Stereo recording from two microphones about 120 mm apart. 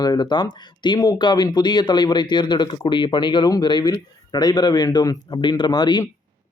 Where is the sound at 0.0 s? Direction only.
35° left (ahead or behind).